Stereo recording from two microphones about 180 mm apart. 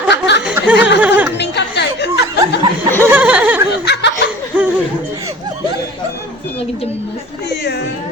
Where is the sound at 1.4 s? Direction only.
70° left (ahead or behind).